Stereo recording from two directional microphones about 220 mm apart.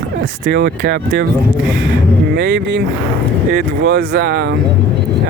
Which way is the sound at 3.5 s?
40° right (ahead or behind).